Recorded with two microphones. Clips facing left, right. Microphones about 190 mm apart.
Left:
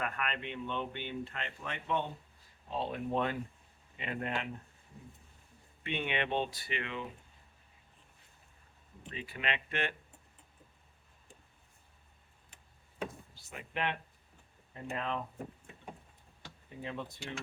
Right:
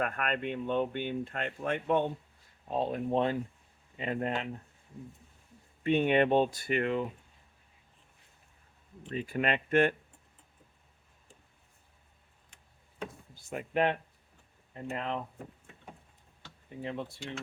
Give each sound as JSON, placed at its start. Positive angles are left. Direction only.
{"t": 0.0, "sound": "speech", "side_deg": -50}
{"t": 5.8, "sound": "speech", "side_deg": -40}
{"t": 9.1, "sound": "speech", "side_deg": -45}
{"t": 13.3, "sound": "speech", "side_deg": -45}
{"t": 14.7, "sound": "speech", "side_deg": -30}
{"t": 16.8, "sound": "speech", "side_deg": -30}